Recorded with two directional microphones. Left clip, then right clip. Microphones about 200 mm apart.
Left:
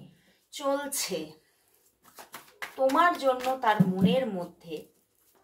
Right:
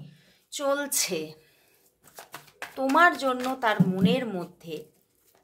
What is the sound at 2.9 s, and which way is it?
Speech, 55° right (ahead or behind).